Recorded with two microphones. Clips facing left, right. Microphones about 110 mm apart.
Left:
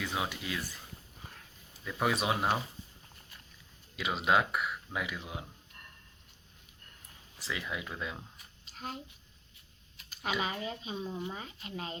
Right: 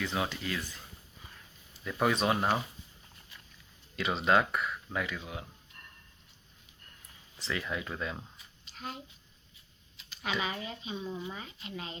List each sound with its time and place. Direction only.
0.0 s speech: 10° left (ahead or behind)
1.8 s speech: centre (ahead or behind)
3.9 s speech: 5° left (ahead or behind)
7.3 s speech: 10° left (ahead or behind)
8.6 s a sound: 40° left (ahead or behind)
10.4 s speech: 35° left (ahead or behind)